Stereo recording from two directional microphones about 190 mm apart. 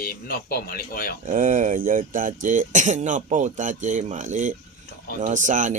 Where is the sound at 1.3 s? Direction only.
45° right (ahead or behind).